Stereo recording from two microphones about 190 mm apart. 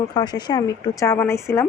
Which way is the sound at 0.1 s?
20° left (ahead or behind).